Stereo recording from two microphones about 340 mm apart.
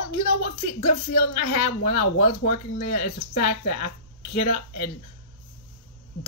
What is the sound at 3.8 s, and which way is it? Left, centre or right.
Speech, left.